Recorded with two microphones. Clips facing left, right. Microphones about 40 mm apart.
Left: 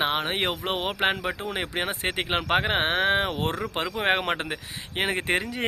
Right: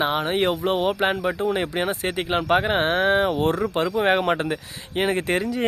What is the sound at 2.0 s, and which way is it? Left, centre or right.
Speech, left.